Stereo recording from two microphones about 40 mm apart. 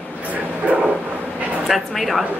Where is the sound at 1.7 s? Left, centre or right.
Centre.